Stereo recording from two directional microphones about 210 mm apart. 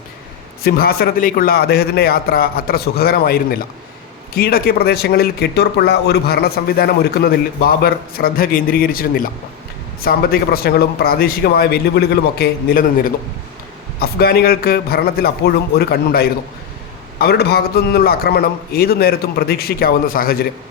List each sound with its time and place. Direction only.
0.6 s speech: 45° left (ahead or behind)